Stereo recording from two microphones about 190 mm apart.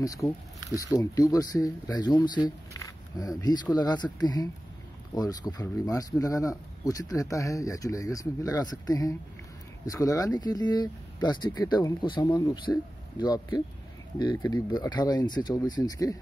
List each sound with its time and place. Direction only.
0.0 s speech: 15° left (ahead or behind)